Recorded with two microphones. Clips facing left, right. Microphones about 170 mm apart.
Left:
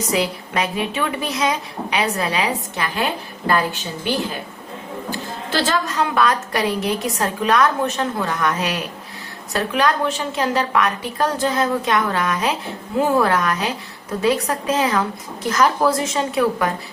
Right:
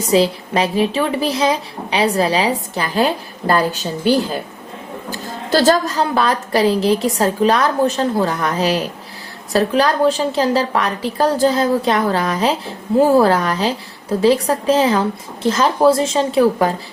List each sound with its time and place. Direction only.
0.1 s a woman's voice: 30° right (ahead or behind)